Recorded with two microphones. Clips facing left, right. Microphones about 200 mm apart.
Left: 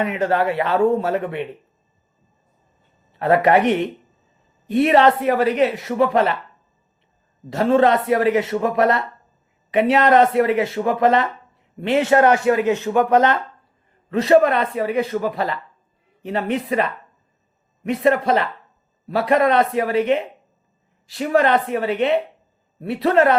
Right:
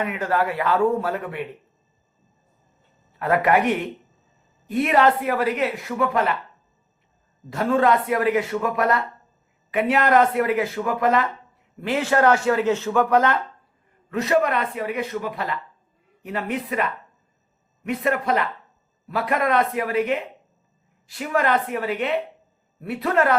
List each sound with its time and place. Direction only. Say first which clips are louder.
0.0 s a woman's voice: left 4 dB; 25° left (ahead or behind)
3.1 s a woman's voice: left 4 dB; 30° left (ahead or behind)
7.5 s a woman's voice: left 4 dB; 25° left (ahead or behind)